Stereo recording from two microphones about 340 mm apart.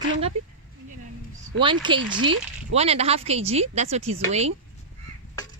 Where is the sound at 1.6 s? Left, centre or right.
Centre.